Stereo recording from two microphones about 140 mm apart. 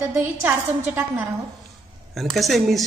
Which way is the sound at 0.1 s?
15° right (ahead or behind).